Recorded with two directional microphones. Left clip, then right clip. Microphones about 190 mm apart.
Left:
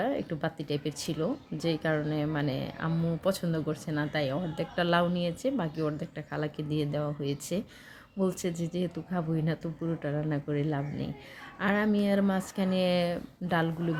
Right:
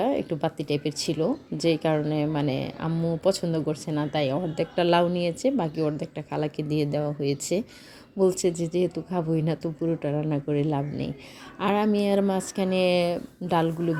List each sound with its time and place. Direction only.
0.0 s a woman's voice: 20° right (ahead or behind)